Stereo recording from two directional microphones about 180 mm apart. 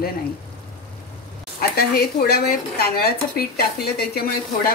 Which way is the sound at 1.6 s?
60° left (ahead or behind).